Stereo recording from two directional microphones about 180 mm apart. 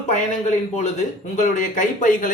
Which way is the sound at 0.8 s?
40° left (ahead or behind).